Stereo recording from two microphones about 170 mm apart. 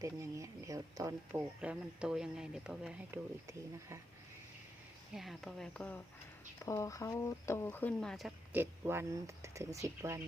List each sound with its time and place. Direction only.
0.0 s speech: 20° right (ahead or behind)
3.4 s speech: 15° right (ahead or behind)
5.1 s speech: centre (ahead or behind)
6.7 s speech: 20° left (ahead or behind); by 8.3 s centre (ahead or behind)
8.5 s speech: 15° right (ahead or behind)